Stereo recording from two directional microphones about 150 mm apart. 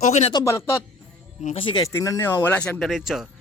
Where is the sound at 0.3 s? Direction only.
20° left (ahead or behind).